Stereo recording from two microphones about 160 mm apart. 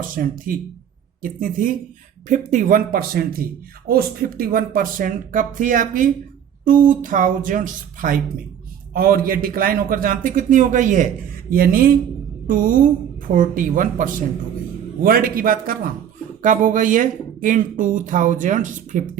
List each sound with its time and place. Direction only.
0.2 s a man's voice: 60° right (ahead or behind)
11.5 s a man's voice: 65° right (ahead or behind)